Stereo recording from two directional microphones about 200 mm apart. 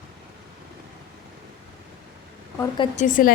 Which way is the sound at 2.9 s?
40° left (ahead or behind).